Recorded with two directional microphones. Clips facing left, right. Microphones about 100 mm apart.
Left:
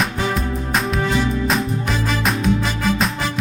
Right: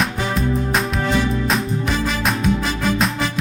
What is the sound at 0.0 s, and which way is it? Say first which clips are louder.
Music: even; centre (ahead or behind).